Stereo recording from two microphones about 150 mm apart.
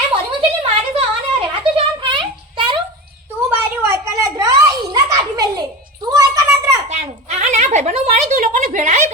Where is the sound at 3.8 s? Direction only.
20° right (ahead or behind).